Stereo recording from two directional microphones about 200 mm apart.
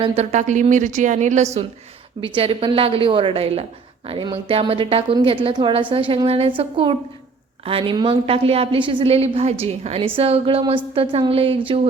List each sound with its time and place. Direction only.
0.0 s a woman's voice: 30° right (ahead or behind)